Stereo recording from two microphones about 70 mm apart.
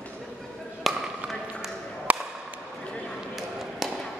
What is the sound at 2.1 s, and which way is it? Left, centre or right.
Whip, right.